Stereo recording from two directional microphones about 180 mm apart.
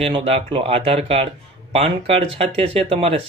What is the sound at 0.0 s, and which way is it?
Speech, 35° right (ahead or behind).